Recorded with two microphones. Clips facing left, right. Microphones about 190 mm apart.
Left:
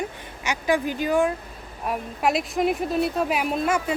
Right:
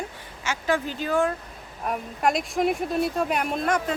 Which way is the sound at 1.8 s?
5° left (ahead or behind).